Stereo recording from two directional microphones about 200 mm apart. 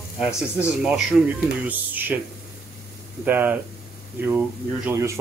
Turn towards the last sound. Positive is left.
turn(degrees=-15)  # may be behind; listen again after turning